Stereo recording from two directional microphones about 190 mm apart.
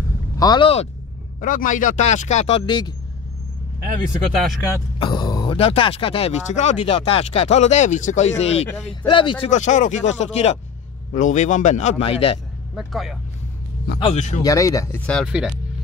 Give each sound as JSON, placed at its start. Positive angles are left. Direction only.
{"t": 0.4, "sound": "speech", "side_deg": 25}
{"t": 1.4, "sound": "speech", "side_deg": 45}
{"t": 4.9, "sound": "speech", "side_deg": 25}
{"t": 9.5, "sound": "speech", "side_deg": 40}
{"t": 12.7, "sound": "speech", "side_deg": 0}
{"t": 13.9, "sound": "speech", "side_deg": 30}
{"t": 14.4, "sound": "speech", "side_deg": 15}
{"t": 15.2, "sound": "speech", "side_deg": -5}